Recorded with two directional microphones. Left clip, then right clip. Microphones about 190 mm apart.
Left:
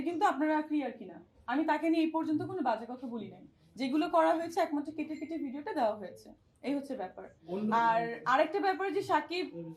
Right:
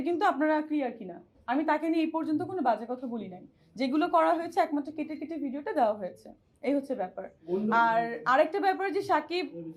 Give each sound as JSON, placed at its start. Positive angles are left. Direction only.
{"t": 0.0, "sound": "a woman's voice", "side_deg": -20}